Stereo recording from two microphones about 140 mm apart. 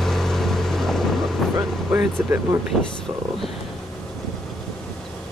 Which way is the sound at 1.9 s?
15° right (ahead or behind).